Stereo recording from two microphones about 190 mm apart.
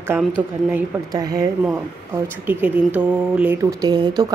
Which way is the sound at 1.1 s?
20° right (ahead or behind).